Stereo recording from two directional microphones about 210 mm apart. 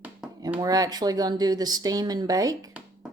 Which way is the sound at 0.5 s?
15° right (ahead or behind).